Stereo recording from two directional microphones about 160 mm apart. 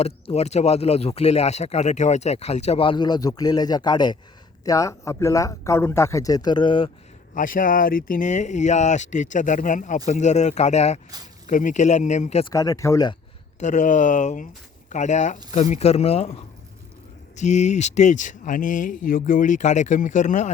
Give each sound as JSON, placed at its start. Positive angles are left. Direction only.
{"t": 0.0, "sound": "speech", "side_deg": 40}
{"t": 7.3, "sound": "speech", "side_deg": 60}
{"t": 12.5, "sound": "speech", "side_deg": 20}
{"t": 13.6, "sound": "speech", "side_deg": 50}
{"t": 17.3, "sound": "speech", "side_deg": 45}